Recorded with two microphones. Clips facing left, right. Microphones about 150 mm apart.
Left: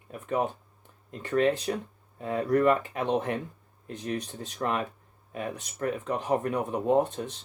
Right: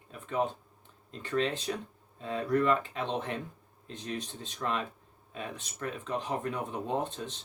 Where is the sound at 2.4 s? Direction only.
55° left (ahead or behind).